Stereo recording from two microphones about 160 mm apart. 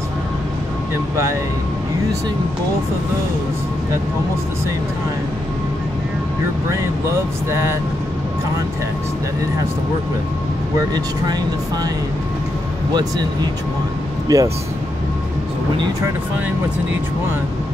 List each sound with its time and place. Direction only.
14.2 s speech: 20° right (ahead or behind)